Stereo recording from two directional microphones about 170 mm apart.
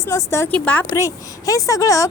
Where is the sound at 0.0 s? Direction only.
20° left (ahead or behind).